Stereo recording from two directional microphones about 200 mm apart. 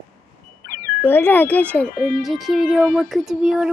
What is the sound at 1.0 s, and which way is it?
Speech, 10° left (ahead or behind).